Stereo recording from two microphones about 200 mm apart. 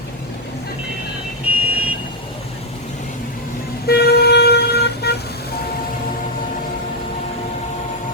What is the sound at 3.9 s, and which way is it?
Vehicle, 55° left (ahead or behind).